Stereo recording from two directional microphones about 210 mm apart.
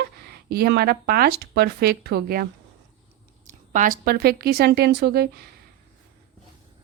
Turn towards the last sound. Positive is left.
turn(degrees=-50)  # may be behind; listen again after turning